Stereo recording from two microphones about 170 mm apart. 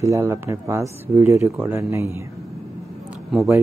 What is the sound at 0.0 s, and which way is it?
Speech, 20° right (ahead or behind).